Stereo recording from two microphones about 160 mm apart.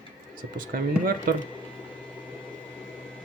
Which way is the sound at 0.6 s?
60° right (ahead or behind).